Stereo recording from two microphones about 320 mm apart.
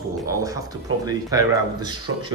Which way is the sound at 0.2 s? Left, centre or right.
Centre.